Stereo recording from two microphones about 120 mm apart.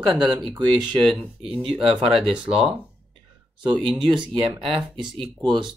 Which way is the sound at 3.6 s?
40° right (ahead or behind).